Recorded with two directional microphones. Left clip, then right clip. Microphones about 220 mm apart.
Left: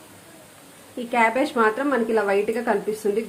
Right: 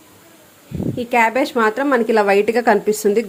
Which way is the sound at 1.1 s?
30° right (ahead or behind).